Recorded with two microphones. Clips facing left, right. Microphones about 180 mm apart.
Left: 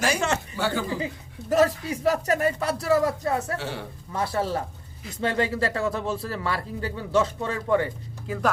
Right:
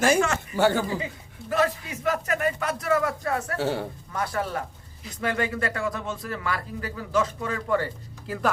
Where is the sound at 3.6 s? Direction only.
40° right (ahead or behind).